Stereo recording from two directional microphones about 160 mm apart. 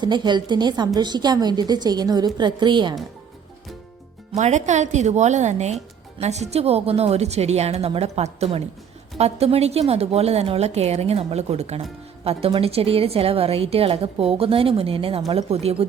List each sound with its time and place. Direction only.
0.0 s a woman's voice: 30° right (ahead or behind)
4.4 s a woman's voice: 45° right (ahead or behind)